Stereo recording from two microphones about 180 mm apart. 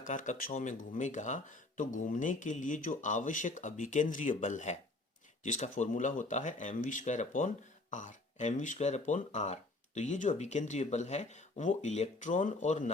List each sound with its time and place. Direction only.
0.0 s speech: 45° left (ahead or behind)